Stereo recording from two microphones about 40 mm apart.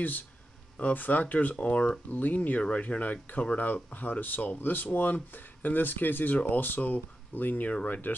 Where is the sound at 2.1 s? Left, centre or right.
Left.